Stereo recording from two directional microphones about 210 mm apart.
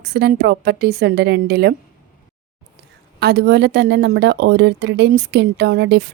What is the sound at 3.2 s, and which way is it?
Speech, 50° right (ahead or behind).